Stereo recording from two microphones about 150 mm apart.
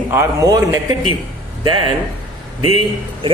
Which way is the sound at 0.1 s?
20° right (ahead or behind).